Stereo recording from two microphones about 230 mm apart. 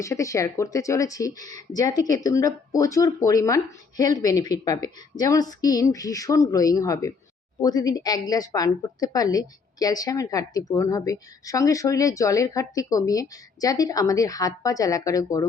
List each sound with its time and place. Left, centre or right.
0.0 s speech: centre